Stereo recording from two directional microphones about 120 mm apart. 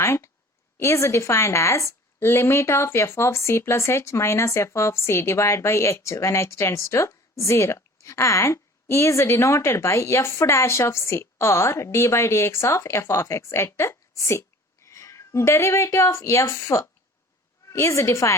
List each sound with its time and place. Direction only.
0.0 s a woman's voice: 20° left (ahead or behind)